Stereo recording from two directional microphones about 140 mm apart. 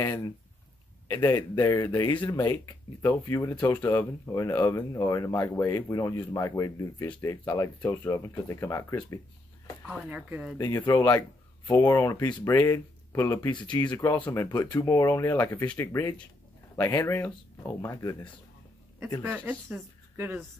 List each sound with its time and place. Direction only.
0.0 s a sound: 20° left (ahead or behind)
1.6 s speech: 25° left (ahead or behind)
10.0 s speech: 10° right (ahead or behind)
10.9 s speech: 25° left (ahead or behind)
13.7 s speech: 30° left (ahead or behind)
13.9 s speech: 20° left (ahead or behind)
19.2 s speech: 10° right (ahead or behind)